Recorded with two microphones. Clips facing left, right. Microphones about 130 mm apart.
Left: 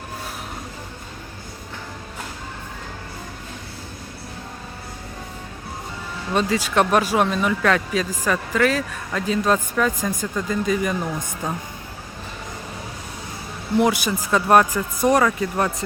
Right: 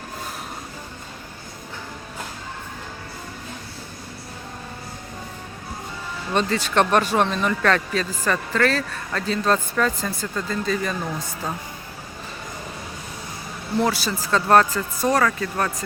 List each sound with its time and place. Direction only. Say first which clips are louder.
6.3 s speech: left 1 dB; 10° left (ahead or behind)
13.7 s speech: left 3 dB; 15° left (ahead or behind)